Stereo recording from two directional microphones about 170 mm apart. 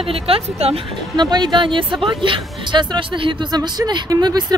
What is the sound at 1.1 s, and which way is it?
Speech, 25° right (ahead or behind).